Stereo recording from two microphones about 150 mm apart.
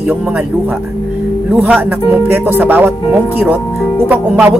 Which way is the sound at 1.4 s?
10° right (ahead or behind).